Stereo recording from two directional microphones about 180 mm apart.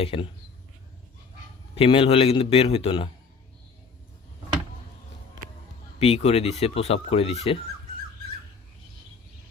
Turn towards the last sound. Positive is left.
turn(degrees=35)  # may be behind; listen again after turning